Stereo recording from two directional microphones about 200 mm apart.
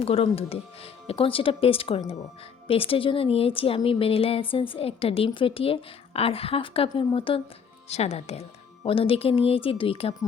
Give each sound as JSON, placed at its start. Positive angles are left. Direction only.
{"t": 0.0, "sound": "speech", "side_deg": 30}